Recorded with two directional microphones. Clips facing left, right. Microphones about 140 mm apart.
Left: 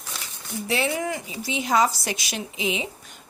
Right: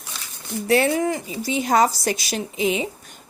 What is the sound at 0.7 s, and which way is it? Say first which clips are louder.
Speech: right 7 dB; 50° right (ahead or behind).